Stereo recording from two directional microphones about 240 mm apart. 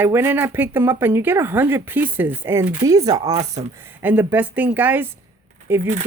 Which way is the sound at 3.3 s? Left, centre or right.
Right.